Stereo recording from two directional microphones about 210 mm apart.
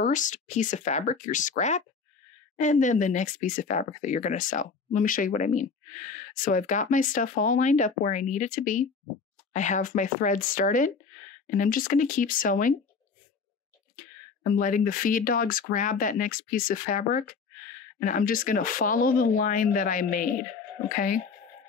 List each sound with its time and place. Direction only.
0.0 s speech: 35° left (ahead or behind)
14.5 s speech: 40° left (ahead or behind)